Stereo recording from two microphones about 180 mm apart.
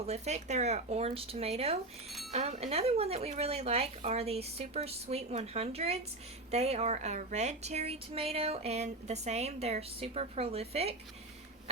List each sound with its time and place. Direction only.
0.0 s a woman's voice: 40° right (ahead or behind)